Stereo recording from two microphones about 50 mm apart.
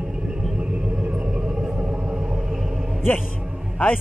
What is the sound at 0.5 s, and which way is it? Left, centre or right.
Rumble, right.